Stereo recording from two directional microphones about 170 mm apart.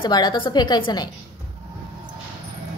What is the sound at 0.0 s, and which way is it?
A woman's voice, 25° left (ahead or behind).